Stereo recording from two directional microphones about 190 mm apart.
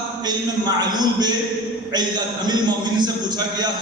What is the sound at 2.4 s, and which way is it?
Speech, 20° right (ahead or behind).